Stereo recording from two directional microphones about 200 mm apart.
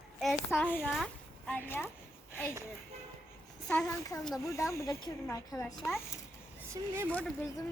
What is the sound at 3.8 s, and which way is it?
A child's voice, 15° left (ahead or behind).